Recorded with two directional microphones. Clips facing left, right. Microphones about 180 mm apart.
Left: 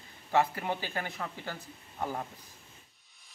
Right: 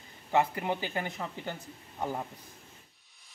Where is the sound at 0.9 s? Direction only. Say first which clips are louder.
Right 2 dB; 20° right (ahead or behind).